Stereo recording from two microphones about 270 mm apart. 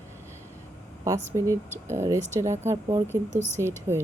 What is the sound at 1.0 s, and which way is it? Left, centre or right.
Speech, centre.